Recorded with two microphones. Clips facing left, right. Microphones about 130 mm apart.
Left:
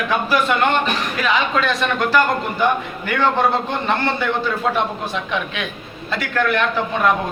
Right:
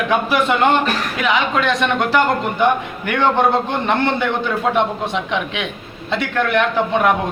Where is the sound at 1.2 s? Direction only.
15° right (ahead or behind).